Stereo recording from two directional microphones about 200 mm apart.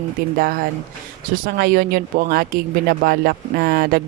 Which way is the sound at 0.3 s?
45° right (ahead or behind).